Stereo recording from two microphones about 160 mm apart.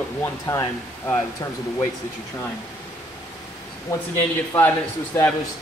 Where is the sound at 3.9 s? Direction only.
20° left (ahead or behind).